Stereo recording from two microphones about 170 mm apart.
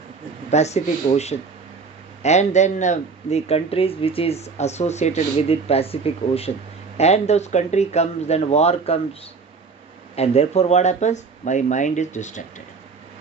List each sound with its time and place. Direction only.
0.5 s speech: 40° left (ahead or behind)
10.2 s speech: 40° left (ahead or behind)